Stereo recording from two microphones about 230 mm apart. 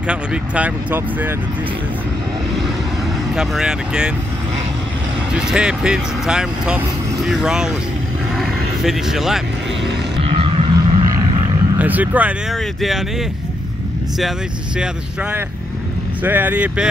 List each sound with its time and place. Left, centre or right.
0.0 s speech: centre
3.3 s speech: centre
5.3 s speech: centre
8.4 s vehicle: centre
10.2 s a sound: right
11.8 s speech: centre
16.2 s speech: centre